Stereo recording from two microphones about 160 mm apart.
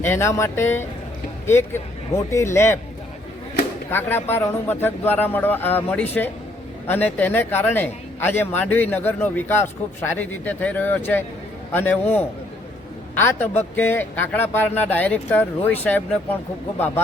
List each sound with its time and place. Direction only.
0.0 s speech: 15° left (ahead or behind)
3.8 s speech: 15° left (ahead or behind)